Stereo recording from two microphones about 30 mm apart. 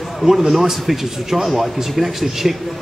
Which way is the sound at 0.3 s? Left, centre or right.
Centre.